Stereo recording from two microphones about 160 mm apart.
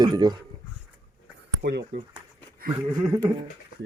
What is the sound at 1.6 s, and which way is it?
Speech, 80° right.